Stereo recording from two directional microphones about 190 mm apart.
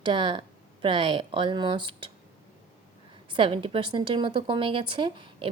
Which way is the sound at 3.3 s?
25° right (ahead or behind).